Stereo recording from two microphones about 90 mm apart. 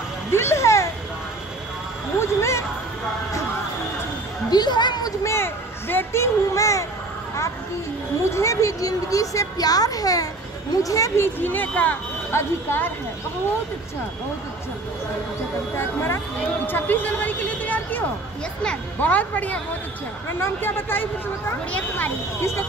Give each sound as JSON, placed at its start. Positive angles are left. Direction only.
{"t": 0.3, "sound": "music", "side_deg": 30}
{"t": 2.1, "sound": "a sound", "side_deg": 30}
{"t": 4.5, "sound": "speech", "side_deg": 55}
{"t": 5.2, "sound": "a sound", "side_deg": 30}
{"t": 8.3, "sound": "a woman's voice", "side_deg": 35}
{"t": 11.3, "sound": "speech", "side_deg": 20}
{"t": 15.8, "sound": "a woman's voice", "side_deg": 25}
{"t": 20.2, "sound": "speech", "side_deg": 25}
{"t": 22.4, "sound": "speech", "side_deg": 30}